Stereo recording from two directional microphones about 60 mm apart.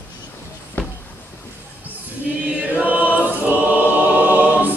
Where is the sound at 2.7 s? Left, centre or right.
Right.